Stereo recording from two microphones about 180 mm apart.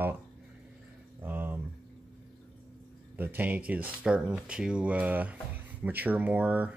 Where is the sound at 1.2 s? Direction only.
10° right (ahead or behind).